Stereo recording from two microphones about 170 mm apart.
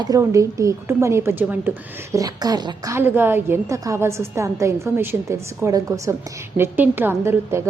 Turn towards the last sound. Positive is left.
turn(degrees=-15)  # may be behind; listen again after turning